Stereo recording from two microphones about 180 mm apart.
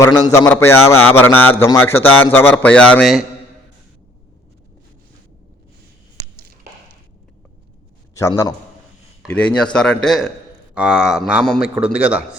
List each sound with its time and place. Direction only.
0.0 s a man's voice: 20° left (ahead or behind); by 3.2 s centre (ahead or behind)
8.1 s a man's voice: 15° left (ahead or behind)
9.2 s a man's voice: 5° left (ahead or behind)